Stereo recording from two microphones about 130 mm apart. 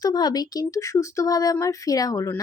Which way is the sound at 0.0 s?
30° left (ahead or behind).